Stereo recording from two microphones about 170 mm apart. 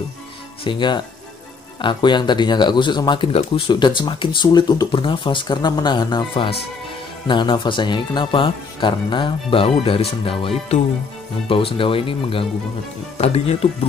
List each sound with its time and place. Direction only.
0.7 s speech: 25° left (ahead or behind)